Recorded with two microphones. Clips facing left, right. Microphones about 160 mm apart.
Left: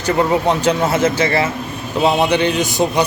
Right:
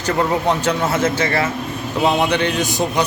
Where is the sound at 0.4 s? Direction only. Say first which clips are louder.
Left 3 dB; 15° left (ahead or behind).